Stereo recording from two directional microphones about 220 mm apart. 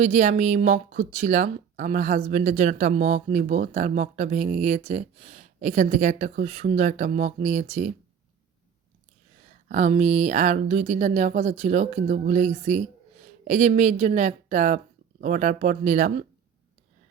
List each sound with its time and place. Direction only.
0.0 s speech: 35° right (ahead or behind)
9.6 s speech: 35° right (ahead or behind)